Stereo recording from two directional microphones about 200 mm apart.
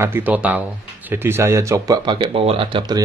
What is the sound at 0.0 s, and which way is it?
Speech, 10° right (ahead or behind).